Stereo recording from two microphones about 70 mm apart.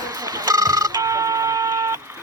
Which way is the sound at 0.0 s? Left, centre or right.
Right.